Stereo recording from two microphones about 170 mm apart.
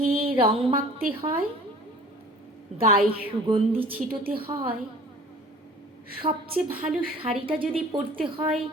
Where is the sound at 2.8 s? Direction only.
35° right (ahead or behind).